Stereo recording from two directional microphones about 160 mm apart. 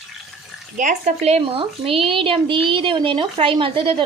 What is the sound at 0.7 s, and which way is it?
Speech, 50° right (ahead or behind).